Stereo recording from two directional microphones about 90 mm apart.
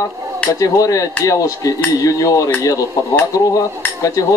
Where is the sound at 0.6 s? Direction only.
40° left (ahead or behind).